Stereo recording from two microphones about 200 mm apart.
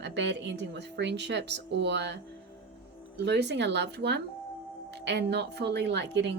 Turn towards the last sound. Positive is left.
turn(degrees=-60)  # may be behind; listen again after turning